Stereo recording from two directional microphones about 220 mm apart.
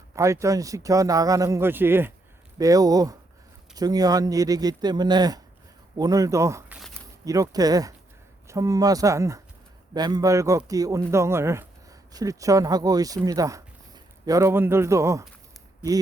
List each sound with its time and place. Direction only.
0.2 s speech: 15° right (ahead or behind)